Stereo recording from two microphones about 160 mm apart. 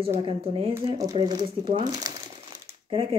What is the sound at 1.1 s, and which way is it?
Speech, 25° right (ahead or behind).